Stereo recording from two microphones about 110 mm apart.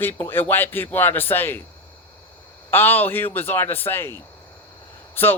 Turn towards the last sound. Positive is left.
turn(degrees=20)  # may be behind; listen again after turning